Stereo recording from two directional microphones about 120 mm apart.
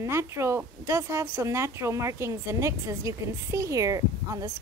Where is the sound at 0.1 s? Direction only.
25° right (ahead or behind).